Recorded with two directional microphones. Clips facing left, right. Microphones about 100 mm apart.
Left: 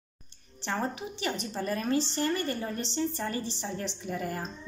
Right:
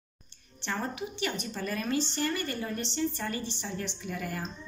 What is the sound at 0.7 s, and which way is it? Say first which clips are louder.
A woman's voice: left 2 dB; 35° left (ahead or behind).